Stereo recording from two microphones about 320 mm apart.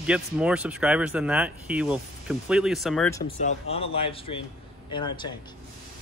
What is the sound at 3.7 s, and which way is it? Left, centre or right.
Speech, centre.